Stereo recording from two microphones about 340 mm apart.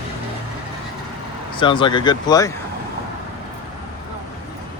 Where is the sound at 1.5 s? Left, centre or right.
Centre.